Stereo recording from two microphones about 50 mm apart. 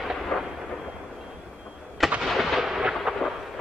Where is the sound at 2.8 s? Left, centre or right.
Centre.